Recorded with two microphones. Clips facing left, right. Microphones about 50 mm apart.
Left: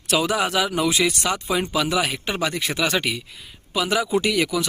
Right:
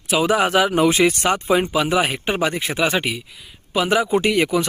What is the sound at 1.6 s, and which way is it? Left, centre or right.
Speech, right.